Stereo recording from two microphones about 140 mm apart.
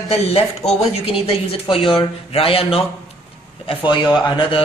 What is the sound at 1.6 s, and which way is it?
Speech, 35° left (ahead or behind).